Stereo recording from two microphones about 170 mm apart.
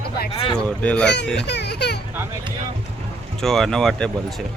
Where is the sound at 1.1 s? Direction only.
90° left; by 2.0 s 75° left (ahead or behind).